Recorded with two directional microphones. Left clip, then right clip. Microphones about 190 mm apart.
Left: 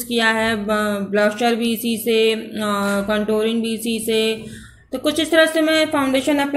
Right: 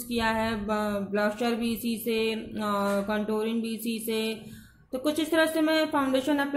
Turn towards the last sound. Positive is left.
turn(degrees=-5)  # may be behind; listen again after turning